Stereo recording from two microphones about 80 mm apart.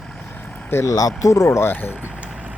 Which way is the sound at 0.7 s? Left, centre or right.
Left.